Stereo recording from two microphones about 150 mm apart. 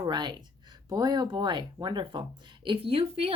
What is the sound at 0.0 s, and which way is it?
Speech, 30° right (ahead or behind).